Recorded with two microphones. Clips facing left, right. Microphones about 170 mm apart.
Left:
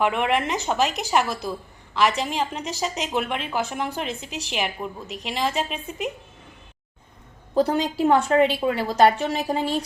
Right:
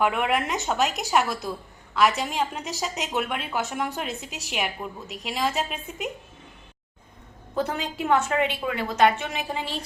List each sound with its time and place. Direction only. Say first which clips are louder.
0.0 s a woman's voice: left 2 dB; centre (ahead or behind)
7.5 s a woman's voice: left 7 dB; 35° left (ahead or behind)